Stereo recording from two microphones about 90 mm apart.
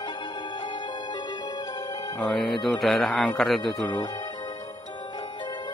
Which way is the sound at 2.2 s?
Centre (ahead or behind).